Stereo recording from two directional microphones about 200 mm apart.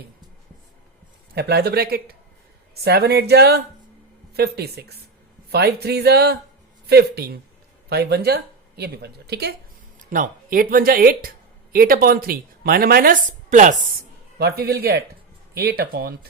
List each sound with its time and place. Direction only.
1.4 s speech: 55° right (ahead or behind)
10.0 s speech: 40° right (ahead or behind)
14.3 s speech: 50° right (ahead or behind)